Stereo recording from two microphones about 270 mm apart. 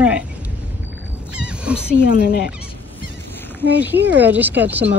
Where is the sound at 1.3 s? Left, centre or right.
Centre.